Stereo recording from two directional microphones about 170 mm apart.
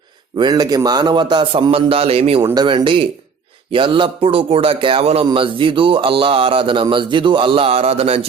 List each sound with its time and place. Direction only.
0.3 s a man's voice: 25° right (ahead or behind)